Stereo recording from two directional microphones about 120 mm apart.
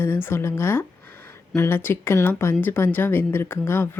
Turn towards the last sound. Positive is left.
turn(degrees=20)  # may be behind; listen again after turning